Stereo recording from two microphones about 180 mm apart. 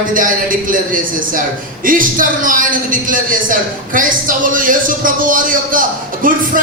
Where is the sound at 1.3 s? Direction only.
50° right (ahead or behind).